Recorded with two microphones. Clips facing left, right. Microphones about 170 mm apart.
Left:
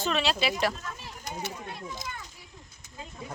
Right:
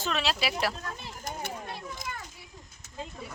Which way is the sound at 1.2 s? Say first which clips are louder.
Left 1 dB; 50° right (ahead or behind).